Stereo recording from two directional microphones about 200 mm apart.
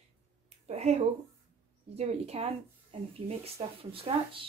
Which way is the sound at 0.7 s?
35° right (ahead or behind).